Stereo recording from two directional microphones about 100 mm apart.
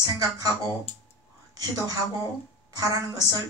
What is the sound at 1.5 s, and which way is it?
A woman's voice, 40° right (ahead or behind).